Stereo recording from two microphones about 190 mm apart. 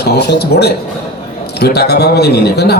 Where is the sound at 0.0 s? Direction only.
60° left (ahead or behind).